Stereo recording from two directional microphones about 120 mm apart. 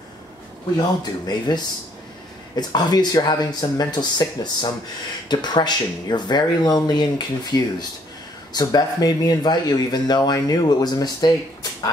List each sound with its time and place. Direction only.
0.7 s speech: 35° left (ahead or behind)